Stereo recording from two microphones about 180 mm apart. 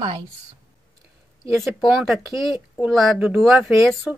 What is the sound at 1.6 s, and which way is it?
Speech, centre (ahead or behind).